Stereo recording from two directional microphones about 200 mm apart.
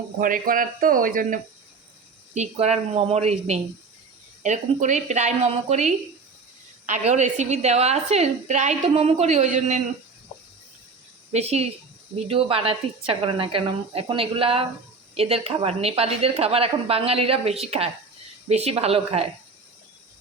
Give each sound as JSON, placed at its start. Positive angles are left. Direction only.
{"t": 0.2, "sound": "a woman's voice", "side_deg": -45}
{"t": 11.3, "sound": "a woman's voice", "side_deg": -30}